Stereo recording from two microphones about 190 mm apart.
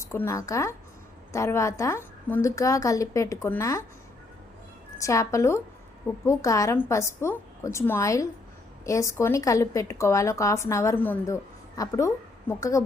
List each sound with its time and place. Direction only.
0.0 s a woman's voice: 15° left (ahead or behind)
4.9 s a woman's voice: 15° left (ahead or behind)